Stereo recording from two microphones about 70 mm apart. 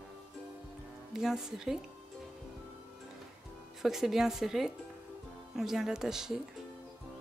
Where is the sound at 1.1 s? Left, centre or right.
Centre.